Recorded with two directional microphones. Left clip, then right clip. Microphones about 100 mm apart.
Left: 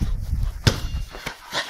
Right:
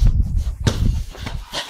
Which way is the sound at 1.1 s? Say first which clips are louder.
Left 5 dB; 30° left (ahead or behind).